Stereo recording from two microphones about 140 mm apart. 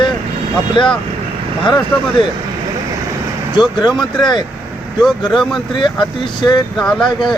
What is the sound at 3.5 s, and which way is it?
Speech, 35° left (ahead or behind).